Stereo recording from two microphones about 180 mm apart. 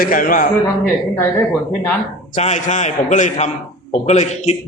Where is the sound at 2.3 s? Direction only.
40° left (ahead or behind).